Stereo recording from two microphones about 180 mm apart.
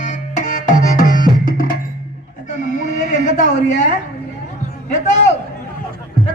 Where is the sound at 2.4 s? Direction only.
45° left (ahead or behind).